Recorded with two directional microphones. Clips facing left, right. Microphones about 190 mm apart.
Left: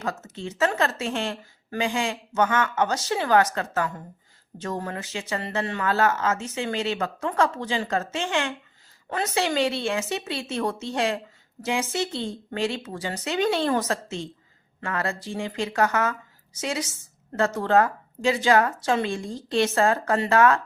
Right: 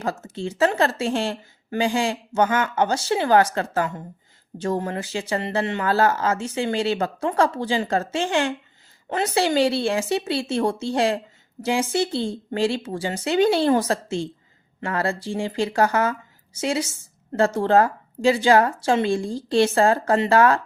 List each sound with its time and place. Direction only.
0.0 s speech: 30° right (ahead or behind)